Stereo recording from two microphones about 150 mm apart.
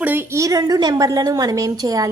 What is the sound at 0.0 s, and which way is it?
A woman's voice, 15° right (ahead or behind).